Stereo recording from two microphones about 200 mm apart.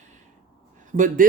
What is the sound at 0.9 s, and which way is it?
Speech, 40° right (ahead or behind).